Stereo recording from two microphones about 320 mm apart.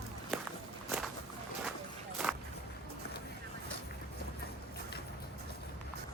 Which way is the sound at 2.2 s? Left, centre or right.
Centre.